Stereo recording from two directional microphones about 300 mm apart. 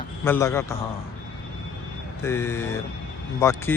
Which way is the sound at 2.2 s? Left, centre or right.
Centre.